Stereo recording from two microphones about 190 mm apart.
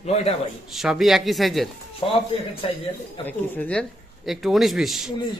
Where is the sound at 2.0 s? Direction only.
30° left (ahead or behind).